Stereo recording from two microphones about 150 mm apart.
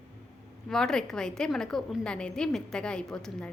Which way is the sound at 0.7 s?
5° left (ahead or behind).